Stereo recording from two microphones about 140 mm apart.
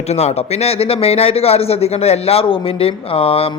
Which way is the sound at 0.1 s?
50° left (ahead or behind).